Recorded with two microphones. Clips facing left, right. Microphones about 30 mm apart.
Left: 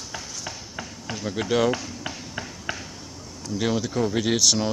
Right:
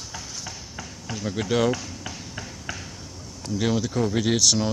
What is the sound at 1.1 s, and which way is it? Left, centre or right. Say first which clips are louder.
Speech: left 1 dB; centre.